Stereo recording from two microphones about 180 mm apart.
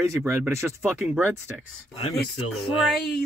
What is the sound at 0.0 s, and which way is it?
Speech, 15° right (ahead or behind).